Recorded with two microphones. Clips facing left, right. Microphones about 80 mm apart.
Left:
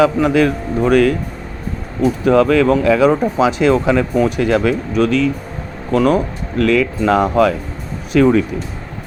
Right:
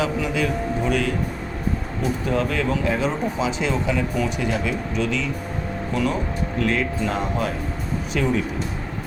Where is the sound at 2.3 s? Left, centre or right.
Left.